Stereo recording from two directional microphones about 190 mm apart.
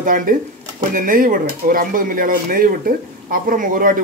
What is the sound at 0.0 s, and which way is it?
Speech, 45° right (ahead or behind).